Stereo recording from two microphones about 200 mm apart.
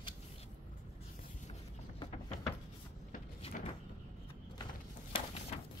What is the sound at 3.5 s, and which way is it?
Cupboard open or close, 40° left (ahead or behind).